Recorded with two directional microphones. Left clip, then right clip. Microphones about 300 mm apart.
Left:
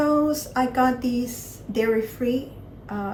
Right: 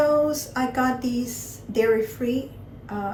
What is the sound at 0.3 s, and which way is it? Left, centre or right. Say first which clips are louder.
Speech: left 2 dB; centre.